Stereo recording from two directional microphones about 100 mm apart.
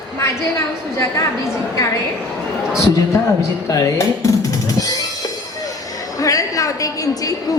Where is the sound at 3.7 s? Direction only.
35° left (ahead or behind).